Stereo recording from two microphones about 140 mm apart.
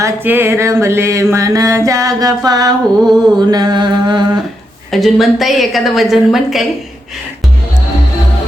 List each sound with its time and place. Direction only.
0.0 s music: 15° right (ahead or behind); by 4.3 s 30° right (ahead or behind)
4.9 s a woman's voice: centre (ahead or behind)